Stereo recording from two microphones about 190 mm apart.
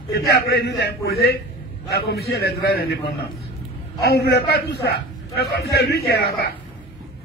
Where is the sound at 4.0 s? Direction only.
55° left (ahead or behind).